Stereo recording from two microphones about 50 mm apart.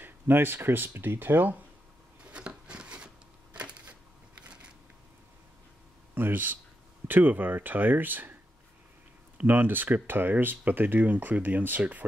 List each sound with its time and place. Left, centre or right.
0.0 s speech: right
2.3 s a sound: centre
6.1 s speech: right
9.4 s speech: right